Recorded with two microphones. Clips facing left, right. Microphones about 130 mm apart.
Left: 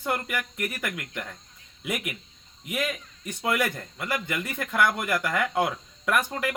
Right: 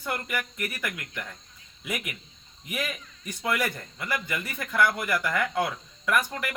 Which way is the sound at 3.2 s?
20° left (ahead or behind).